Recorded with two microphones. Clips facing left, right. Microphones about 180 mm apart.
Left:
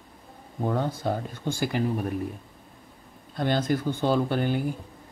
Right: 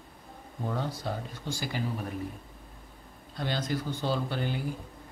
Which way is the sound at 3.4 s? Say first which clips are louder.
Left 7 dB; 50° left (ahead or behind).